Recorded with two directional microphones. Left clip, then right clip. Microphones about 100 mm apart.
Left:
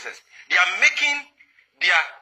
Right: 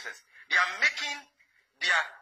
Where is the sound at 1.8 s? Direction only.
5° left (ahead or behind).